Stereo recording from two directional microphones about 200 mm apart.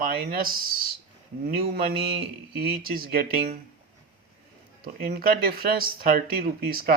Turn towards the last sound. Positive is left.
turn(degrees=-50)  # may be behind; listen again after turning